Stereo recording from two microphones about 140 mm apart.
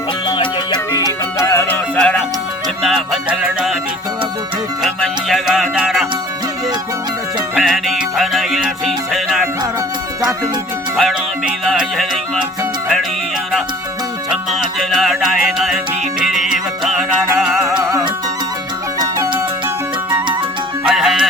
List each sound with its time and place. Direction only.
0.3 s music: 30° left (ahead or behind)
1.4 s music: 20° left (ahead or behind); by 3.8 s 5° right (ahead or behind)
4.8 s music: centre (ahead or behind)
7.5 s music: centre (ahead or behind)
10.2 s speech: 25° right (ahead or behind)
10.9 s music: centre (ahead or behind)
14.3 s music: centre (ahead or behind)
18.9 s music: 25° right (ahead or behind)
20.8 s music: centre (ahead or behind)